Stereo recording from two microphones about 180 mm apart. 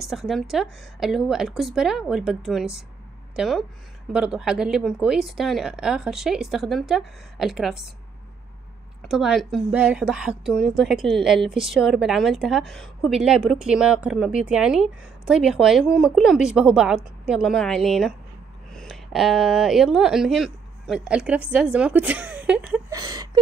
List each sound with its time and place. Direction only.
0.0 s a woman's voice: centre (ahead or behind)
9.0 s a woman's voice: centre (ahead or behind)
22.8 s a sound: 20° right (ahead or behind)